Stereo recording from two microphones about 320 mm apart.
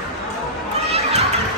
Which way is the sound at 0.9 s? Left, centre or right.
Centre.